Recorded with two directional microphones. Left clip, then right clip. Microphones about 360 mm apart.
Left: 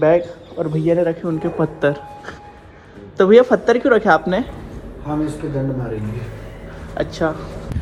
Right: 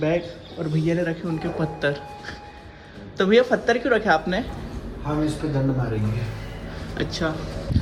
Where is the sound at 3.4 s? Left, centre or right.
Left.